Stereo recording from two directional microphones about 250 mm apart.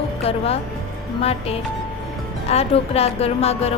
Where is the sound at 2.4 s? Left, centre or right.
Left.